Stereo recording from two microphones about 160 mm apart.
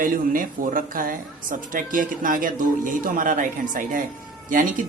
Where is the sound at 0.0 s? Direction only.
60° right (ahead or behind).